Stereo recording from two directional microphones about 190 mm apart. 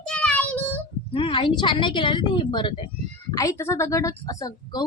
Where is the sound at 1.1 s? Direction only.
30° left (ahead or behind).